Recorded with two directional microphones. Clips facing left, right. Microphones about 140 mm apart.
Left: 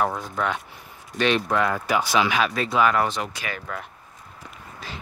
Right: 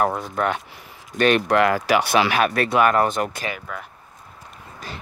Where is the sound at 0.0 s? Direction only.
50° right (ahead or behind).